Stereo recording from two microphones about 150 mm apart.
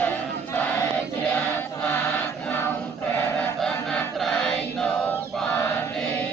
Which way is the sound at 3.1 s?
10° left (ahead or behind).